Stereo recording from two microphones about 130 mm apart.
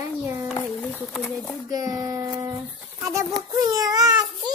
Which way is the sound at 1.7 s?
25° right (ahead or behind).